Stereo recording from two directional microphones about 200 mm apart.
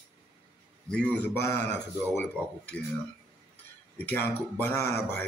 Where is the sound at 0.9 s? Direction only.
5° left (ahead or behind).